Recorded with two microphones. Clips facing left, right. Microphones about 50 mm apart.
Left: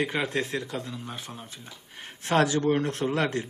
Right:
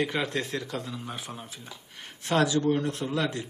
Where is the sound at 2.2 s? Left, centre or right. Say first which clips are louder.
Left 1 dB; left.